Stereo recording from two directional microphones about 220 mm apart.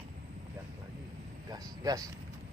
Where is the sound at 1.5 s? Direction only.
15° right (ahead or behind).